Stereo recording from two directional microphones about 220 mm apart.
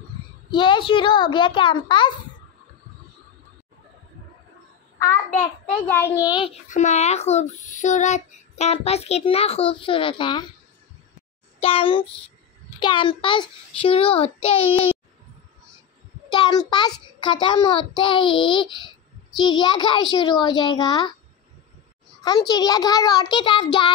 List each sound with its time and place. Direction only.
0.5 s a child's voice: 20° left (ahead or behind)
5.9 s a child's voice: 10° left (ahead or behind)
6.2 s a child's voice: 20° left (ahead or behind)
6.7 s a child's voice: 30° left (ahead or behind)
11.6 s a child's voice: 25° left (ahead or behind)
16.3 s a child's voice: 20° left (ahead or behind)
22.2 s a child's voice: 20° left (ahead or behind)